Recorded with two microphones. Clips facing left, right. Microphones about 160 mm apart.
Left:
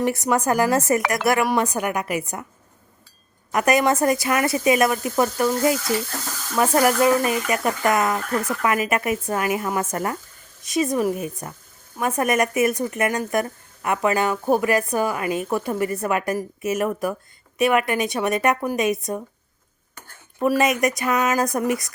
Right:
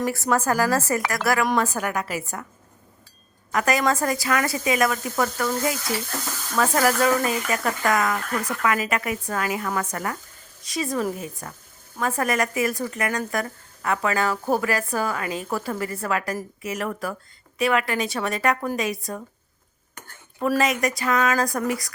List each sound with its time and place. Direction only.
0.1 s a woman's voice: 20° left (ahead or behind)
3.5 s speech: 20° left (ahead or behind)
20.4 s speech: 15° left (ahead or behind)